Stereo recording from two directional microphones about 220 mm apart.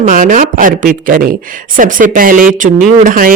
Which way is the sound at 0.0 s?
35° right (ahead or behind).